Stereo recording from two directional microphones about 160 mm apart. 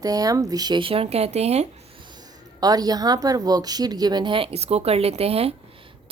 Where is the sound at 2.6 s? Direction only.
25° right (ahead or behind).